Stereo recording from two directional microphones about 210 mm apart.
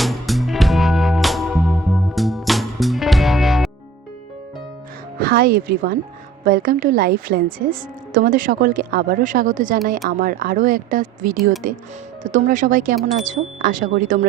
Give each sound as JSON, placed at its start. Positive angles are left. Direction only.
{"t": 0.0, "sound": "music", "side_deg": 0}
{"t": 5.2, "sound": "a woman's voice", "side_deg": -45}